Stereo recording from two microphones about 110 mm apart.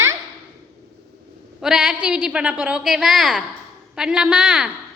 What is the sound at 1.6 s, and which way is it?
A woman's voice, 5° right (ahead or behind).